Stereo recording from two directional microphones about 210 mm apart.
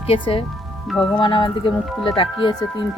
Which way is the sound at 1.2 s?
25° left (ahead or behind).